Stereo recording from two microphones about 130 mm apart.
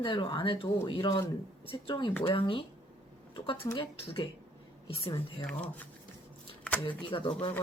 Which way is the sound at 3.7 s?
40° left (ahead or behind).